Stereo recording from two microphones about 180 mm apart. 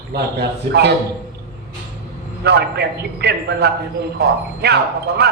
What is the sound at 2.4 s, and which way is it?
A man's voice, 65° right (ahead or behind).